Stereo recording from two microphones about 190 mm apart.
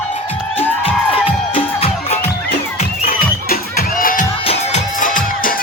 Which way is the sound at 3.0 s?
50° left (ahead or behind).